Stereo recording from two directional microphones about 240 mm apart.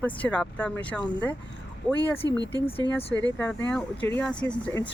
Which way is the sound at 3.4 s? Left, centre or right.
Centre.